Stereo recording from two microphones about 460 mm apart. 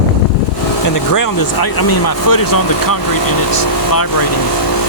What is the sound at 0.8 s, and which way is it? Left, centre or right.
Speech, left.